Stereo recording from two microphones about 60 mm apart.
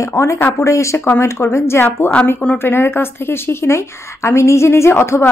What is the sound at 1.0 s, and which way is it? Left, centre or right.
Speech, left.